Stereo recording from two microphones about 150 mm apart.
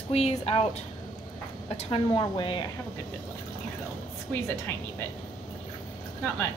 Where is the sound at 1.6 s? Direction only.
40° left (ahead or behind).